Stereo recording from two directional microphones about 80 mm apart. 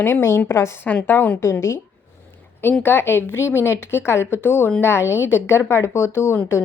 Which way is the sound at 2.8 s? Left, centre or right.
Left.